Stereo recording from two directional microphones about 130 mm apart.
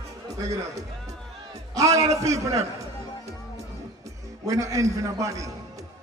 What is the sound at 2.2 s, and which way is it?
Music, 25° right (ahead or behind).